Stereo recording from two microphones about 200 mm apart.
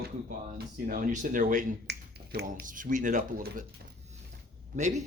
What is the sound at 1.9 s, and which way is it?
Speech, 55° right (ahead or behind).